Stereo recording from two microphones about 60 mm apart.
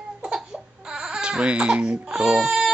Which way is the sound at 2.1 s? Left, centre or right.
Centre.